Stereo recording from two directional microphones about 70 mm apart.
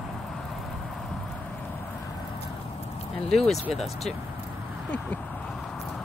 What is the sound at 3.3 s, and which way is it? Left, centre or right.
Speech, centre.